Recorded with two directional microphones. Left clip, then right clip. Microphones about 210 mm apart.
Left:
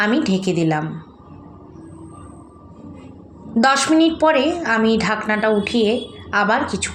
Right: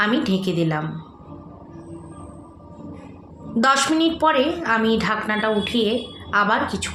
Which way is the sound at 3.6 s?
20° left (ahead or behind).